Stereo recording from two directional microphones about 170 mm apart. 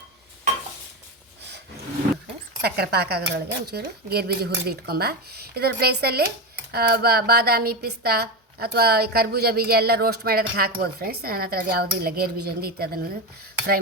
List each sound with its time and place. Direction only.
2.6 s speech: 70° right (ahead or behind)